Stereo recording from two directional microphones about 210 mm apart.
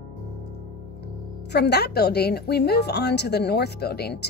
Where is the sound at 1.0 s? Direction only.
50° left (ahead or behind).